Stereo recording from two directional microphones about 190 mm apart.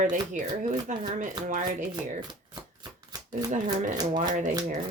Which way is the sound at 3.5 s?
40° right (ahead or behind).